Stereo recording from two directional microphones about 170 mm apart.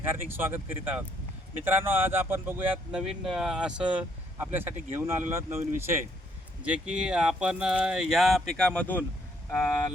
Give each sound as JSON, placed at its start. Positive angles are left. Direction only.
{"t": 0.1, "sound": "speech", "side_deg": -10}
{"t": 6.7, "sound": "speech", "side_deg": -5}